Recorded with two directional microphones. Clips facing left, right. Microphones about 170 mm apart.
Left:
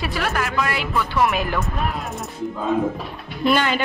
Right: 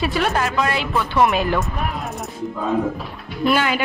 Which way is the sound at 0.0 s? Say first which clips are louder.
Right 4 dB; 25° right (ahead or behind).